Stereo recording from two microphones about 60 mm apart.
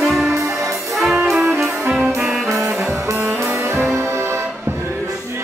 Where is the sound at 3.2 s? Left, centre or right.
Right.